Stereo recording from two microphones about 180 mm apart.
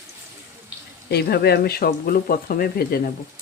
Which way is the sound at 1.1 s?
65° left (ahead or behind).